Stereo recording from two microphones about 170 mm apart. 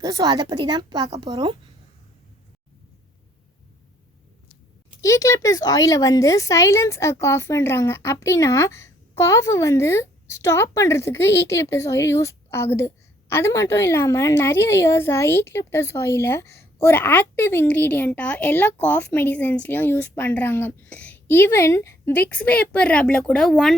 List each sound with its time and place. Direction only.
0.0 s a woman's voice: 25° right (ahead or behind)
4.9 s speech: 20° left (ahead or behind); by 23.7 s centre (ahead or behind)